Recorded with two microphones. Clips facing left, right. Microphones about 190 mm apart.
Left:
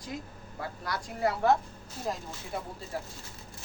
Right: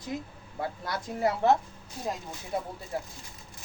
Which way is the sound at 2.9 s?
25° right (ahead or behind).